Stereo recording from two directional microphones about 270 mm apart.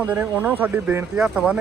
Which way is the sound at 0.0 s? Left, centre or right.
Centre.